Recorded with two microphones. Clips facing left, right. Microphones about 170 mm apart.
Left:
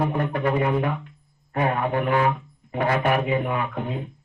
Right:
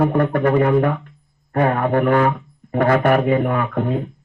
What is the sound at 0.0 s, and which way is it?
Speech, 50° right (ahead or behind).